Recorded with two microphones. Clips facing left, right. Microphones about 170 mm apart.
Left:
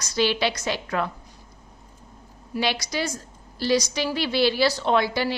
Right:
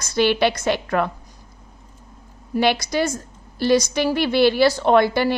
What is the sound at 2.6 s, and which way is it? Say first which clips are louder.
A woman's voice: right 7 dB; 55° right (ahead or behind).